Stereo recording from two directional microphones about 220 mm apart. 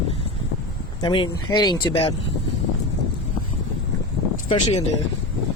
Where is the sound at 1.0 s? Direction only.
20° left (ahead or behind).